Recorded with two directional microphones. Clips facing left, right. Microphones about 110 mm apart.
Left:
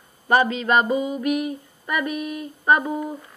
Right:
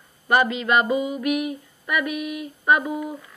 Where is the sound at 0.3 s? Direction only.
35° left (ahead or behind).